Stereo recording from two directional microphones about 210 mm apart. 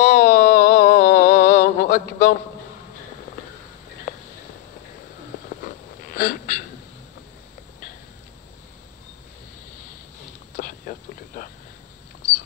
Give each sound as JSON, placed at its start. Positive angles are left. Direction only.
{"t": 0.0, "sound": "a sound", "side_deg": 35}
{"t": 6.1, "sound": "speech", "side_deg": 45}
{"t": 10.5, "sound": "whispering", "side_deg": 40}